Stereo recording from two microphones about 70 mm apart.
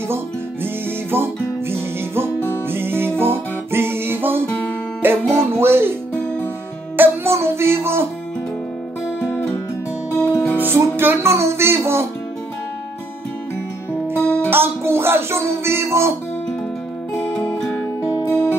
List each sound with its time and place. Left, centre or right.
1.1 s music: right
7.0 s music: right
10.1 s music: centre
10.6 s music: right
14.1 s music: centre
14.5 s music: right
17.5 s music: centre
18.3 s music: left